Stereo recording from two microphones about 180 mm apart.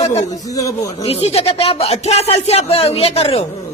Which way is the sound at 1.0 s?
35° left (ahead or behind).